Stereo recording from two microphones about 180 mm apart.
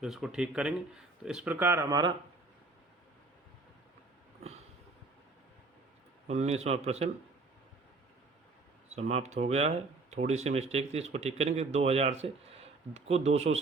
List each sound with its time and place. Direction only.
0.0 s speech: 5° right (ahead or behind); by 2.1 s 20° right (ahead or behind)
6.2 s speech: 40° right (ahead or behind)
8.9 s speech: 35° right (ahead or behind)